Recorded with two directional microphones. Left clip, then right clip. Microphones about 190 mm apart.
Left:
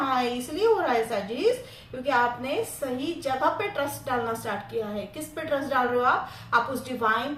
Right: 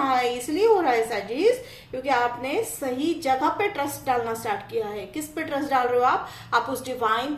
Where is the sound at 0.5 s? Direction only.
40° right (ahead or behind).